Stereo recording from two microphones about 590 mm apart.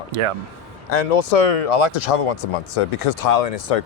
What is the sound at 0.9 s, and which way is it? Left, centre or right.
Speech, left.